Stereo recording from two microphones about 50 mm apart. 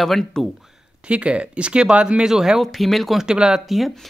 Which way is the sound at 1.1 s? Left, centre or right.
Right.